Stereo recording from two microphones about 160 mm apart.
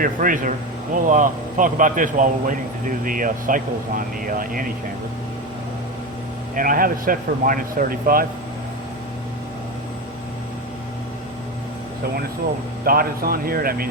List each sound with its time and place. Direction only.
0.0 s a man's voice: 60° right (ahead or behind)
6.6 s a man's voice: 60° right (ahead or behind)
12.8 s speech: 65° right (ahead or behind)